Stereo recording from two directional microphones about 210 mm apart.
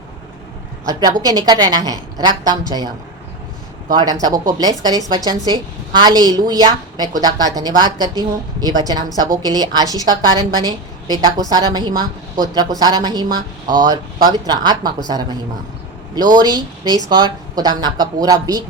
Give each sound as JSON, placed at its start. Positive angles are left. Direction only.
{"t": 0.9, "sound": "a woman's voice", "side_deg": -20}
{"t": 3.9, "sound": "a woman's voice", "side_deg": -20}